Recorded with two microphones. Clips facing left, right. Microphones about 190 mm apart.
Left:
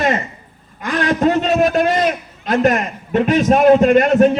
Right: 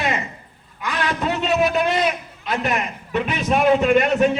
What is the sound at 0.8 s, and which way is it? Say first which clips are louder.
A man's voice: left 7 dB; 45° left (ahead or behind).